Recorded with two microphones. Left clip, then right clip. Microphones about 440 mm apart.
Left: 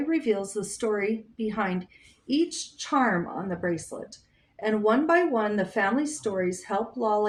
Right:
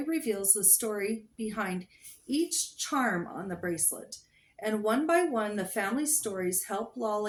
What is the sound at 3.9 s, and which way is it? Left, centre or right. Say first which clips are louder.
A woman's voice: left 6 dB; right.